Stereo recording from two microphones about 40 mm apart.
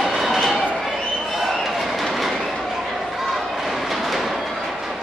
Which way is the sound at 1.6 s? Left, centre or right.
Centre.